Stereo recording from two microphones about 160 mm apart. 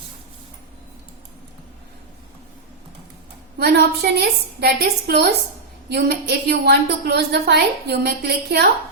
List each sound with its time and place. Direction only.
3.6 s a woman's voice: 85° right